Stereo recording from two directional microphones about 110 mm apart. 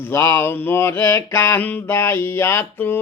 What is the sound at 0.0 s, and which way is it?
Mantra, 20° left (ahead or behind).